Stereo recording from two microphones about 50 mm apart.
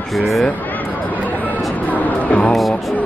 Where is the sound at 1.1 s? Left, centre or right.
Left.